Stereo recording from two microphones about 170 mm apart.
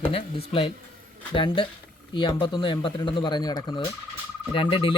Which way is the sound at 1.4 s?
30° left (ahead or behind).